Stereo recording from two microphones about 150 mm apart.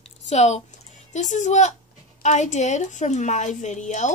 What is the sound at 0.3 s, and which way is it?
A woman's voice, 50° left (ahead or behind).